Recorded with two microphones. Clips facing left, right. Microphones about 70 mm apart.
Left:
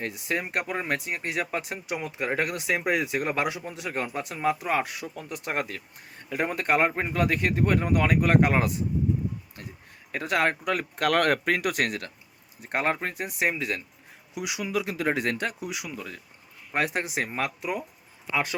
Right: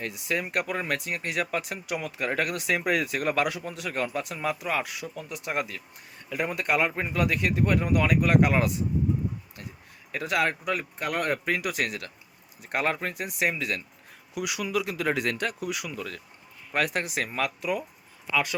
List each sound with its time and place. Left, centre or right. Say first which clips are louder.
0.0 s speech: even; left
9.6 s a sound: even; left
10.1 s speech: left 1 dB; left
10.9 s speech: left 8 dB; left
11.4 s speech: left 3 dB; left
12.5 s speech: left 1 dB; left